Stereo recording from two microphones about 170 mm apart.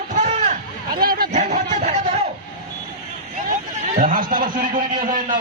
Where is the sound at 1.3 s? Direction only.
45° right (ahead or behind).